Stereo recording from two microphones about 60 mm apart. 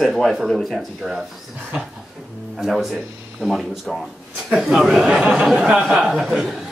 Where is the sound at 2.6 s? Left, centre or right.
Centre.